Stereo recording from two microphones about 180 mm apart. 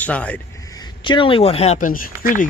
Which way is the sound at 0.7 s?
25° left (ahead or behind).